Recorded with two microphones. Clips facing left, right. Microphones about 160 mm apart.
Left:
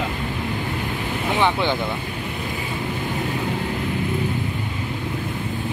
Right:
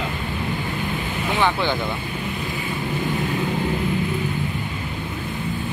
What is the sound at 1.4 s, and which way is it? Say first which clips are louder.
Speech: left 1 dB; 20° left (ahead or behind).